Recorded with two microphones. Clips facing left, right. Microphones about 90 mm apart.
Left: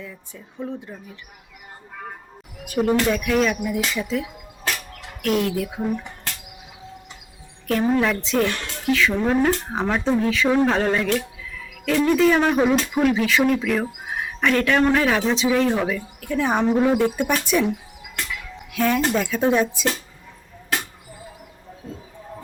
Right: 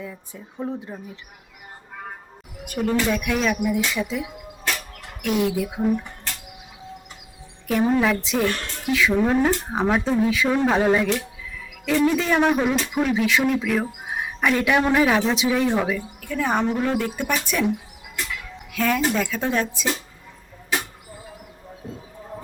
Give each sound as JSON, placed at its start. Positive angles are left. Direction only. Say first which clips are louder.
{"t": 0.0, "sound": "speech", "louder": "right 2 dB", "side_deg": -15}
{"t": 2.9, "sound": "speech", "louder": "left 2 dB", "side_deg": 0}
{"t": 7.7, "sound": "speech", "louder": "even", "side_deg": -5}
{"t": 10.8, "sound": "speech", "louder": "right 1 dB", "side_deg": -10}
{"t": 16.2, "sound": "speech", "louder": "left 2 dB", "side_deg": 5}
{"t": 18.8, "sound": "speech", "louder": "left 1 dB", "side_deg": 5}